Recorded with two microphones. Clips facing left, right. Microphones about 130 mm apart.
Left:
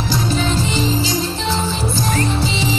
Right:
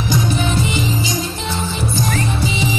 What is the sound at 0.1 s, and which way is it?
Music, 15° right (ahead or behind).